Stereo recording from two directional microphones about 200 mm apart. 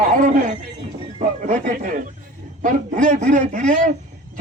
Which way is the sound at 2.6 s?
40° right (ahead or behind).